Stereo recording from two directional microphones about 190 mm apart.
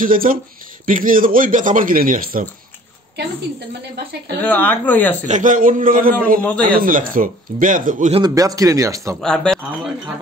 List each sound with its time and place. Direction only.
0.0 s speech: 45° right (ahead or behind)
4.4 s speech: 10° left (ahead or behind)
5.2 s speech: 40° right (ahead or behind)
8.1 s speech: 20° right (ahead or behind)
9.2 s speech: 5° left (ahead or behind)